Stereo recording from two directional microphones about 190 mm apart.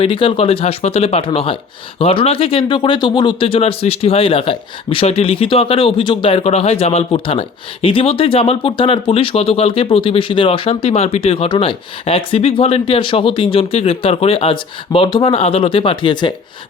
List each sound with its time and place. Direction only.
0.0 s speech: 25° left (ahead or behind)